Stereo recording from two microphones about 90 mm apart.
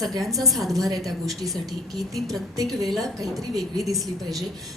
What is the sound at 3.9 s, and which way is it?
Speech, 40° right (ahead or behind).